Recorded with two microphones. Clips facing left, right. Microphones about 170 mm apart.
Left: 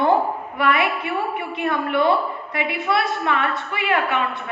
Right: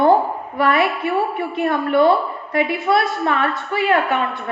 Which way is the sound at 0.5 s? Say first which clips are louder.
Right 4 dB; 40° right (ahead or behind).